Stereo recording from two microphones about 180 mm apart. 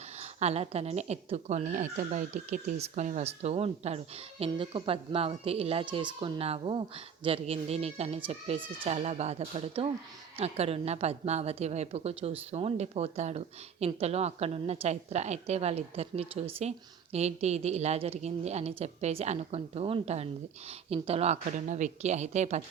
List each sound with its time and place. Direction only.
0.2 s a woman's voice: 35° right (ahead or behind)